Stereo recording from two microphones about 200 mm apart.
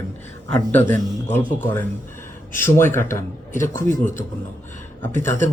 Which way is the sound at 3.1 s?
40° left (ahead or behind).